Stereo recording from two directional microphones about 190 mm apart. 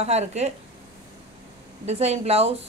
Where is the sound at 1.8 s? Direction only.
35° right (ahead or behind).